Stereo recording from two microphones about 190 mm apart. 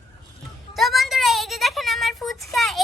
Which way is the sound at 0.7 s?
Centre (ahead or behind).